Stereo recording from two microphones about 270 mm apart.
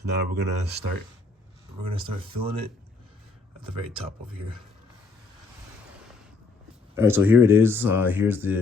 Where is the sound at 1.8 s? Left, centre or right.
Centre.